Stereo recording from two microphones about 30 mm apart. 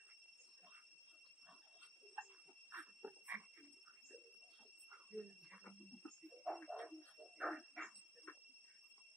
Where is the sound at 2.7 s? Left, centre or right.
Right.